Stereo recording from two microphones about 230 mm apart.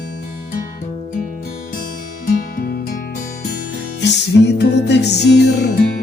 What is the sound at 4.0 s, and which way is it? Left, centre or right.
Music, left.